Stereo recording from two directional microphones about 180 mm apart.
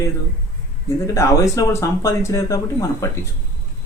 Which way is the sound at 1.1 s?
15° left (ahead or behind).